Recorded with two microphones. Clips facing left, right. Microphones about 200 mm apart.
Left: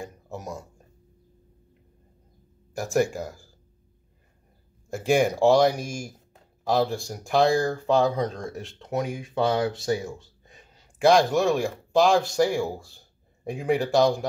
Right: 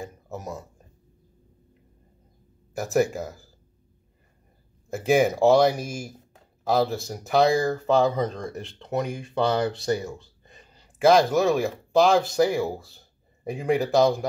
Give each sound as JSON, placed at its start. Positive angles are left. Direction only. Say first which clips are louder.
{"t": 0.0, "sound": "speech", "louder": "right 1 dB", "side_deg": 0}
{"t": 2.7, "sound": "speech", "louder": "right 1 dB", "side_deg": 0}
{"t": 4.8, "sound": "speech", "louder": "right 1 dB", "side_deg": 0}